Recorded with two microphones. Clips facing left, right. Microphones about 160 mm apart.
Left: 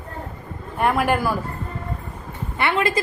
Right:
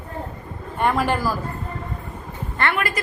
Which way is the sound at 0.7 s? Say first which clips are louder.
Left 1 dB; 5° left (ahead or behind).